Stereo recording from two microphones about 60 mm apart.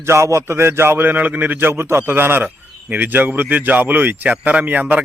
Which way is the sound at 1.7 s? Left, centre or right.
Right.